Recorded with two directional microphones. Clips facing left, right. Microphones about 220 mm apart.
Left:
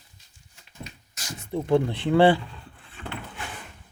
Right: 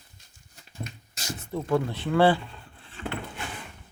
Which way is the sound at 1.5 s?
20° left (ahead or behind).